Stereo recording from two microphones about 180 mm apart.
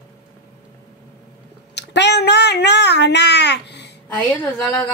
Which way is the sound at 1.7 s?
70° left (ahead or behind).